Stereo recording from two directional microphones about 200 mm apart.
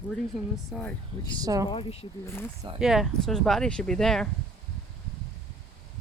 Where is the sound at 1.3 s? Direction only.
20° right (ahead or behind).